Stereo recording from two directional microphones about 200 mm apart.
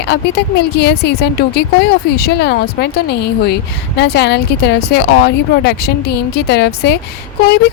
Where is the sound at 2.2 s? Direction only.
55° left (ahead or behind).